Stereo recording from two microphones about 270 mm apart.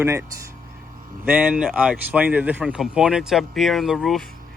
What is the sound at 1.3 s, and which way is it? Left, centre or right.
A man's voice, centre.